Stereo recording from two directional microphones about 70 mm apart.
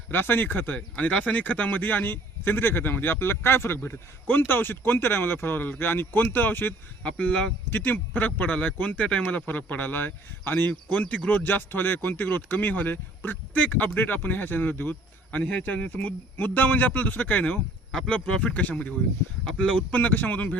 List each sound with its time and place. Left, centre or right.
0.1 s speech: left
7.0 s speech: centre
17.9 s speech: centre